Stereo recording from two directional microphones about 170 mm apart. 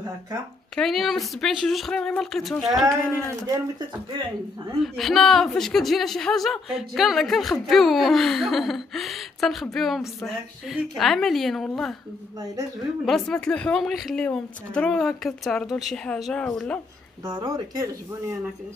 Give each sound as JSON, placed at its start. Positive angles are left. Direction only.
{"t": 0.7, "sound": "a woman's voice", "side_deg": 0}
{"t": 4.8, "sound": "a woman's voice", "side_deg": 0}
{"t": 13.0, "sound": "a woman's voice", "side_deg": 5}
{"t": 17.2, "sound": "speech", "side_deg": -25}